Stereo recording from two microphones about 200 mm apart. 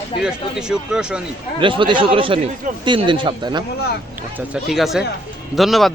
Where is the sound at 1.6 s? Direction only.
25° right (ahead or behind).